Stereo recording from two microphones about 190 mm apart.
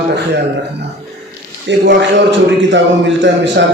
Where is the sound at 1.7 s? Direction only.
70° right (ahead or behind).